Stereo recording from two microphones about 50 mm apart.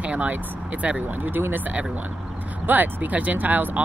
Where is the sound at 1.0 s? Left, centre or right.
Right.